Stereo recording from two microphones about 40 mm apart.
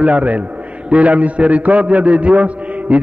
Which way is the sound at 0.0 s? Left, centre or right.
Right.